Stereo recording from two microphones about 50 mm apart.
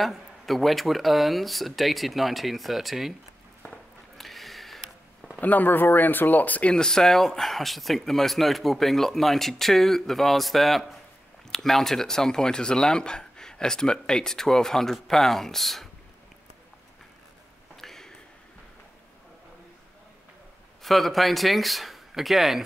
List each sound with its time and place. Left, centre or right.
0.0 s speech: centre
4.2 s a sound: centre
5.4 s speech: left
6.7 s speech: centre
17.7 s a sound: centre
20.8 s speech: centre